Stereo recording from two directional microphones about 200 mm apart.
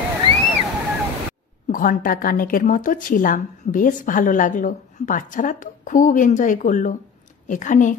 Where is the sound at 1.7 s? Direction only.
45° left (ahead or behind).